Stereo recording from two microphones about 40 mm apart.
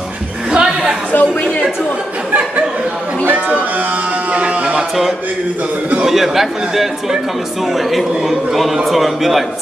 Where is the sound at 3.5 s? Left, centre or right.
Right.